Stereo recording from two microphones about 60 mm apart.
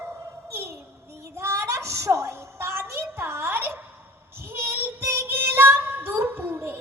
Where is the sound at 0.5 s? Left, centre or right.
Right.